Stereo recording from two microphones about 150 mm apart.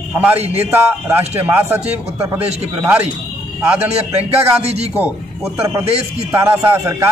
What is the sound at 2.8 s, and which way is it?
Speech, 10° right (ahead or behind).